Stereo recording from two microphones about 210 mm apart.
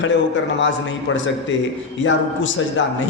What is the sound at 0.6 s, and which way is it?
A man's voice, 60° left (ahead or behind).